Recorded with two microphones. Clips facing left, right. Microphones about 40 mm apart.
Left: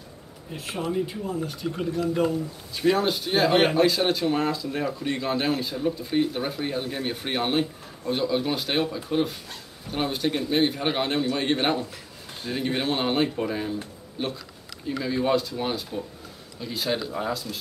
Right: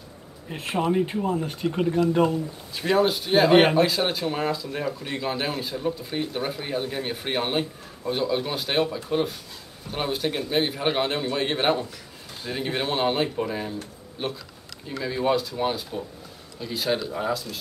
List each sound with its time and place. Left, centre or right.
0.5 s speech: right
2.7 s speech: centre